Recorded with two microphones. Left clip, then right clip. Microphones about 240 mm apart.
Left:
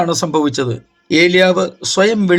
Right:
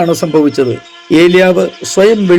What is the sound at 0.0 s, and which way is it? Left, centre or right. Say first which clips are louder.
A man's voice: right 5 dB; centre.